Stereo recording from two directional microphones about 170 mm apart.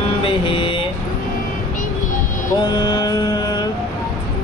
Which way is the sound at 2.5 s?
25° left (ahead or behind).